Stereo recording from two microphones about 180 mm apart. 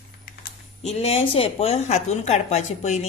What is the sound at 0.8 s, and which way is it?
A woman's voice, 35° left (ahead or behind).